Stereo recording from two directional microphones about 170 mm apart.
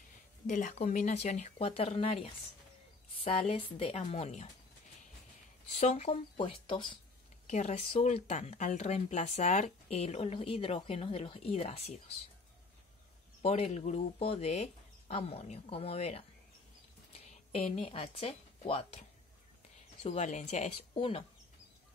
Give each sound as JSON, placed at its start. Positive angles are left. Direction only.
{"t": 0.5, "sound": "speech", "side_deg": 50}
{"t": 5.8, "sound": "speech", "side_deg": 35}
{"t": 7.4, "sound": "speech", "side_deg": 40}
{"t": 13.4, "sound": "speech", "side_deg": 35}